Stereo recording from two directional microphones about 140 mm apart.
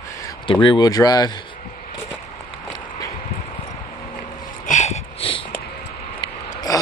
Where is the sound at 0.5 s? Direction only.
35° left (ahead or behind).